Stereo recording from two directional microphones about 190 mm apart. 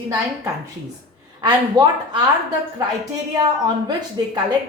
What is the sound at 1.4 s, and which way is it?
Speech, 20° right (ahead or behind).